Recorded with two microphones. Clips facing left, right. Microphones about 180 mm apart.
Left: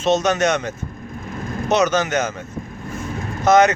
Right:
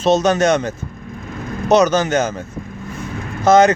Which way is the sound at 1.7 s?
35° right (ahead or behind).